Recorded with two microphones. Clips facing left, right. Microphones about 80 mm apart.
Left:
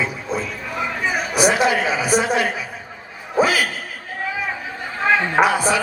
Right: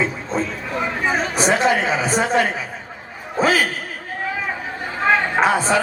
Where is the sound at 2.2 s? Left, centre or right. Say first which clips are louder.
Right 2 dB; centre.